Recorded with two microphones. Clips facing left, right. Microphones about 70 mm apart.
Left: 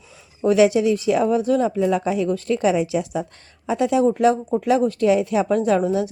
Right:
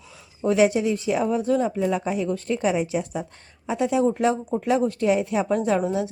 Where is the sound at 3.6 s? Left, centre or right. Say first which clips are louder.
Left 3 dB; left.